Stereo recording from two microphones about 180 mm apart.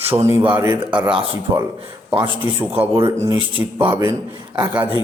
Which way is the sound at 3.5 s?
30° right (ahead or behind).